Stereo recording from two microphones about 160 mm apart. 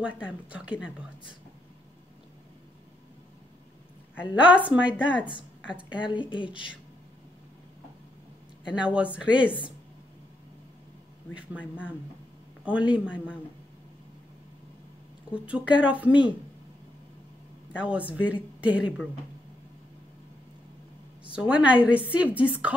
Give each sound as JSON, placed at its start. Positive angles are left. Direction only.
{"t": 0.0, "sound": "a woman's voice", "side_deg": -5}
{"t": 4.2, "sound": "a woman's voice", "side_deg": -5}
{"t": 6.3, "sound": "a woman's voice", "side_deg": 30}
{"t": 8.7, "sound": "a woman's voice", "side_deg": -5}
{"t": 11.5, "sound": "speech", "side_deg": 10}
{"t": 12.6, "sound": "a woman's voice", "side_deg": -5}
{"t": 15.3, "sound": "a woman's voice", "side_deg": -5}
{"t": 17.7, "sound": "a woman's voice", "side_deg": -10}
{"t": 21.4, "sound": "a woman's voice", "side_deg": -10}